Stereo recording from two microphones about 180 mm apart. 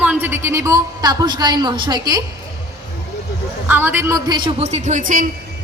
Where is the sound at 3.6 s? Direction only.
10° right (ahead or behind).